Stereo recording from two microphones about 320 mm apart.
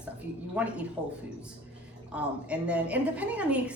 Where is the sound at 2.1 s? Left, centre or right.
Centre.